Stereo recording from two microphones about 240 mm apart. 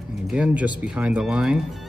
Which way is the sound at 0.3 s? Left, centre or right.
Centre.